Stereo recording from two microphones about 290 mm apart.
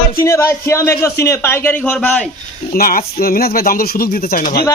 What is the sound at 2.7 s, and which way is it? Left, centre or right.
Speech, left.